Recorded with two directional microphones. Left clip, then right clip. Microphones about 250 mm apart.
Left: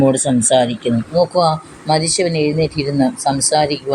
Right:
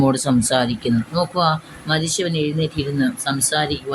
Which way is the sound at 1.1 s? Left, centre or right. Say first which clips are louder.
Left 6 dB; right.